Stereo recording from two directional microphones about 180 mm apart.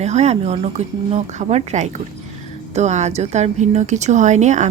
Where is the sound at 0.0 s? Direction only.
40° right (ahead or behind).